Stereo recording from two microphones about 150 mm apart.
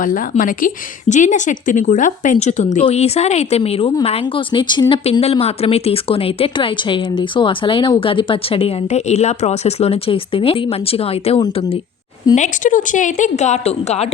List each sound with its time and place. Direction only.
0.0 s a woman's voice: 65° left (ahead or behind); by 4.9 s 30° left (ahead or behind)
5.2 s speech: 45° left (ahead or behind)
12.3 s a woman's voice: 55° left (ahead or behind)